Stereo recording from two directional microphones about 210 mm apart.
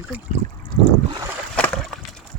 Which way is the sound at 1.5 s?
Centre (ahead or behind).